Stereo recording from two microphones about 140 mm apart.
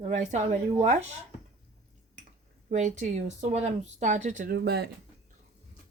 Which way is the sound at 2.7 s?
60° right (ahead or behind).